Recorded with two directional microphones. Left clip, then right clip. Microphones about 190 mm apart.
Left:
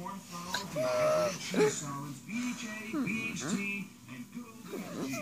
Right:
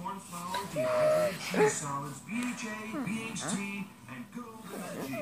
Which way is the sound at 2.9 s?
5° left (ahead or behind).